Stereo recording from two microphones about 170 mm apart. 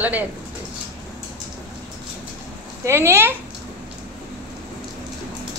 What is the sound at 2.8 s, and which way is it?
Speech, 15° right (ahead or behind).